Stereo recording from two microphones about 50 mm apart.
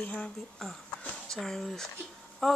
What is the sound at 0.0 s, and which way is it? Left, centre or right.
Speech, left.